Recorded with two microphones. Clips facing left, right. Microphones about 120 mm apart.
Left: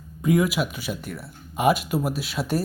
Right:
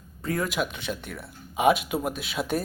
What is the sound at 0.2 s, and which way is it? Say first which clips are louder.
A man's voice: left 6 dB; 15° left (ahead or behind).